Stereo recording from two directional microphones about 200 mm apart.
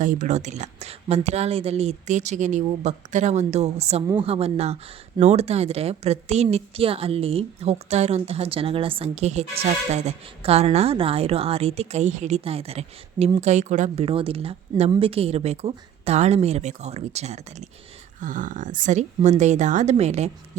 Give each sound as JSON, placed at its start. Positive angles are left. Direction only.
{"t": 0.0, "sound": "speech", "side_deg": -40}